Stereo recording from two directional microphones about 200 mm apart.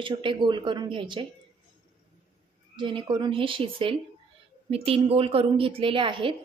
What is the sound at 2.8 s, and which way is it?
A woman's voice, 25° right (ahead or behind).